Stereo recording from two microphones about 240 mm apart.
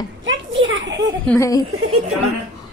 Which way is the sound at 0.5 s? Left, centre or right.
Right.